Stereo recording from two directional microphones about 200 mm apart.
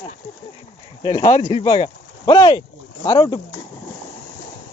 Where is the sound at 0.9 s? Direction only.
20° left (ahead or behind).